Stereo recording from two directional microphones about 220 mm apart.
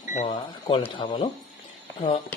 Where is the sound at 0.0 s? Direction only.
35° left (ahead or behind).